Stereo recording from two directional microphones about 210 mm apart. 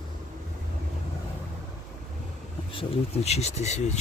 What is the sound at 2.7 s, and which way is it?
Speech, 25° left (ahead or behind).